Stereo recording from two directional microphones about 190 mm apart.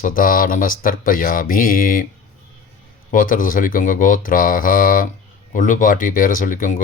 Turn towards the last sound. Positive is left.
turn(degrees=45)  # may be behind; listen again after turning